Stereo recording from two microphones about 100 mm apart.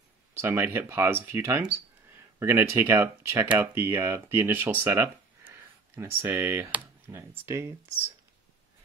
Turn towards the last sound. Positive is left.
turn(degrees=-25)  # may be behind; listen again after turning